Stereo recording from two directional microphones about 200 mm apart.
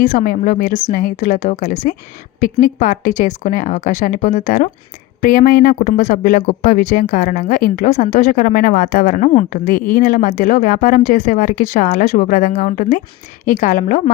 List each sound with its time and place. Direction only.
0.0 s speech: 40° left (ahead or behind)